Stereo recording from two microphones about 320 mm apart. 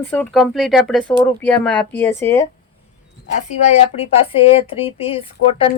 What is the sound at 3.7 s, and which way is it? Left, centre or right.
Speech, centre.